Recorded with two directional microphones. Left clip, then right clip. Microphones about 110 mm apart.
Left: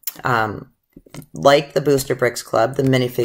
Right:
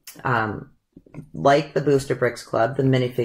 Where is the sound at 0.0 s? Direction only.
15° left (ahead or behind).